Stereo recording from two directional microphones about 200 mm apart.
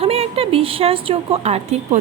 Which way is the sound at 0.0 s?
30° right (ahead or behind).